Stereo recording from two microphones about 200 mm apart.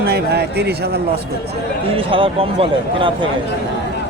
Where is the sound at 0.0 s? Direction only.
55° right (ahead or behind).